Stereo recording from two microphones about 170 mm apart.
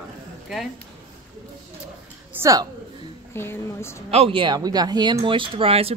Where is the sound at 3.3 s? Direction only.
15° left (ahead or behind).